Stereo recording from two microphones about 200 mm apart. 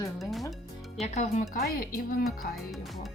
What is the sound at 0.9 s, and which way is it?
Speech, 35° left (ahead or behind).